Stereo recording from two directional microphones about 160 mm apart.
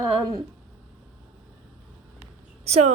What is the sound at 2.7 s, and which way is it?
Speech, 40° right (ahead or behind).